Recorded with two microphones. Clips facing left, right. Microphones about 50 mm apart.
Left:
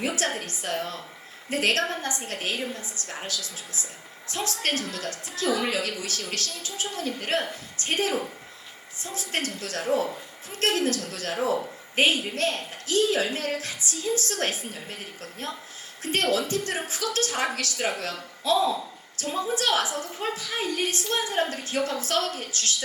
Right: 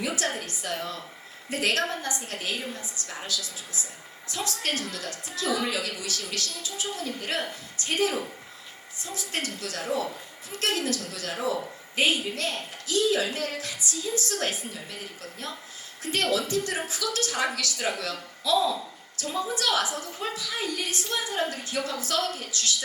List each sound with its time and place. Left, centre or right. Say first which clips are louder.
0.0 s a woman's voice: left 2 dB; left